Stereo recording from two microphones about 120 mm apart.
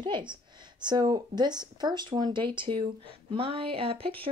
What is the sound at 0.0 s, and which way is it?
Speech, 40° right (ahead or behind).